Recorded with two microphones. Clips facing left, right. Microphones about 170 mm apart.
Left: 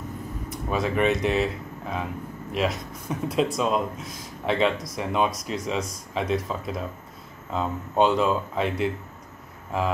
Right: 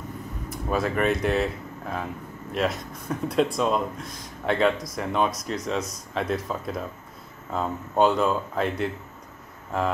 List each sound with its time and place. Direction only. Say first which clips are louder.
0.5 s speech: right 1 dB; centre (ahead or behind)